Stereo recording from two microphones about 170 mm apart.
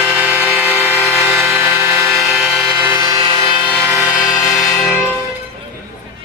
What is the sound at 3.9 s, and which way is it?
Train, 10° right (ahead or behind).